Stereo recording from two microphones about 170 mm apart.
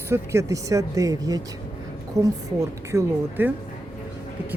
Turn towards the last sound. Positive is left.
turn(degrees=-15)  # may be behind; listen again after turning